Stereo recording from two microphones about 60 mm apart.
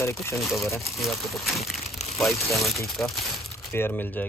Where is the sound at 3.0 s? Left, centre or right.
Centre.